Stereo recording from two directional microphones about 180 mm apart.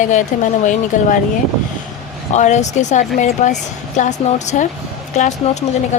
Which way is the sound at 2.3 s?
40° left (ahead or behind).